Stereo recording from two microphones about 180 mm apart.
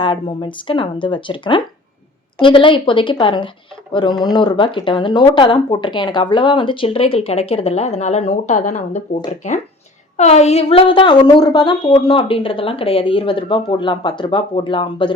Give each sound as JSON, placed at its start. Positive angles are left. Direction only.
{"t": 0.0, "sound": "speech", "side_deg": 30}